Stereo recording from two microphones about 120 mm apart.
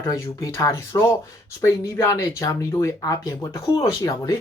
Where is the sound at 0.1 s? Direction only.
30° left (ahead or behind).